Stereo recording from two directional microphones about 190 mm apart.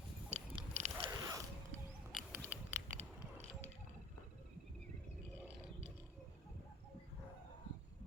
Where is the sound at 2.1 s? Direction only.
10° right (ahead or behind).